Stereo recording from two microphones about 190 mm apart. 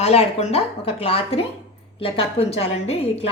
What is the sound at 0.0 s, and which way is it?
A woman's voice, 35° left (ahead or behind).